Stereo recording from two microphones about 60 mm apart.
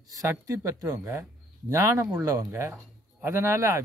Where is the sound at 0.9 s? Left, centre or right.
Right.